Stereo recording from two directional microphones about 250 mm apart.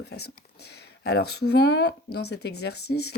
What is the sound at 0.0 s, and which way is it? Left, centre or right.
Speech, left.